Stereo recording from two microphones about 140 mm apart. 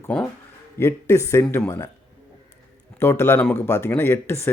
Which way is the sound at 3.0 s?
20° left (ahead or behind).